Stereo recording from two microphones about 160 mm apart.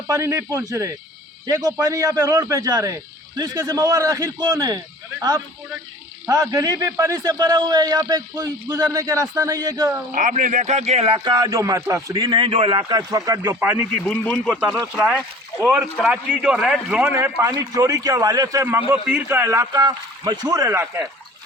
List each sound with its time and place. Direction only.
0.1 s a man's voice: 20° right (ahead or behind)
6.2 s a man's voice: 20° right (ahead or behind)
10.2 s speech: 55° right (ahead or behind); by 11.2 s 40° right (ahead or behind)
11.2 s a man's voice: 25° right (ahead or behind)
13.0 s a man's voice: 20° right (ahead or behind)
14.0 s speech: 5° left (ahead or behind)
14.9 s a man's voice: 5° right (ahead or behind)